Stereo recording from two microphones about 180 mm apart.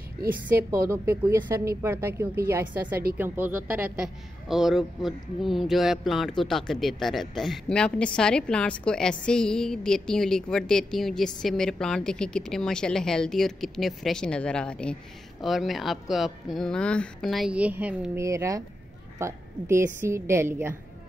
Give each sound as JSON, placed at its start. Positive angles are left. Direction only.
{"t": 0.3, "sound": "a woman's voice", "side_deg": -15}